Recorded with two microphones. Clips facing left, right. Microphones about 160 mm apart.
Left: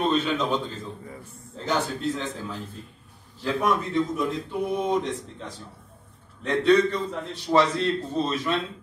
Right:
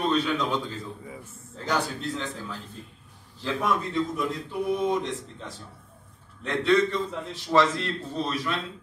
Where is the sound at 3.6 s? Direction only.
20° left (ahead or behind).